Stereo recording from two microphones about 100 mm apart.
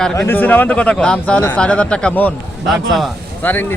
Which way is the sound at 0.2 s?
20° left (ahead or behind).